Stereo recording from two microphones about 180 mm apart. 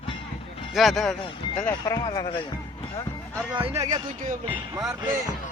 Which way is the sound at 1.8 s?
20° left (ahead or behind).